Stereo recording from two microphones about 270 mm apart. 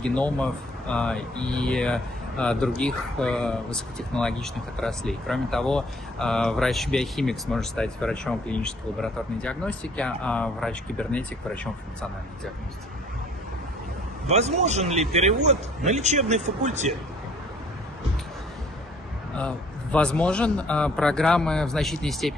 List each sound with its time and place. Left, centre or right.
0.0 s speech: centre
14.3 s a man's voice: right
19.3 s speech: centre